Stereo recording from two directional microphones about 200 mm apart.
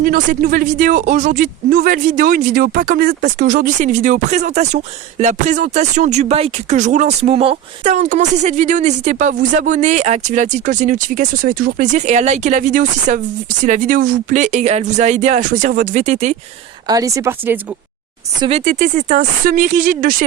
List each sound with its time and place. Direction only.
0.0 s speech: 45° right (ahead or behind)
16.8 s speech: 15° right (ahead or behind)
18.3 s speech: 30° right (ahead or behind)